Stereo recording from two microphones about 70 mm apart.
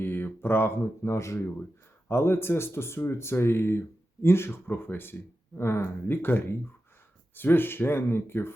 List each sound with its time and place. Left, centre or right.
0.0 s speech: left